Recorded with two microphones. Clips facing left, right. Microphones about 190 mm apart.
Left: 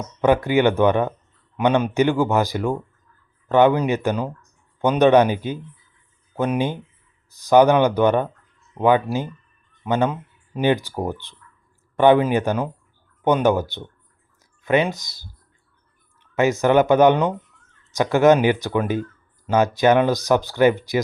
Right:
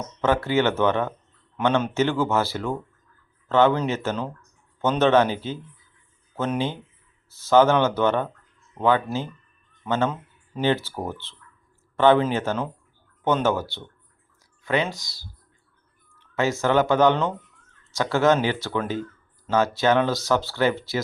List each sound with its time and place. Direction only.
0.2 s speech: 15° left (ahead or behind)